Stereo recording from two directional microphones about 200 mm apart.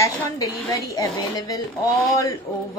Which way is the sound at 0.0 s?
15° left (ahead or behind).